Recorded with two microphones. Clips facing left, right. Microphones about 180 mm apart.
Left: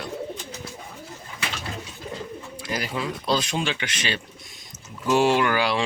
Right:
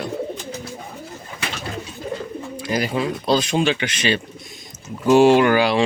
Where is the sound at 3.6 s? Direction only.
70° right (ahead or behind).